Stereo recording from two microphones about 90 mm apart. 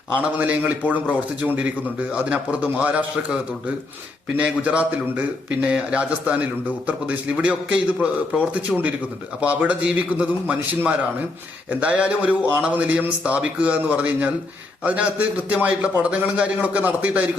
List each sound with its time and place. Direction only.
0.2 s a man's voice: 15° right (ahead or behind)
4.4 s a man's voice: 15° right (ahead or behind)
9.4 s a man's voice: 15° right (ahead or behind)